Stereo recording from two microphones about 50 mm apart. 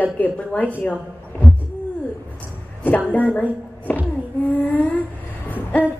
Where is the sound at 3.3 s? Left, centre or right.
Left.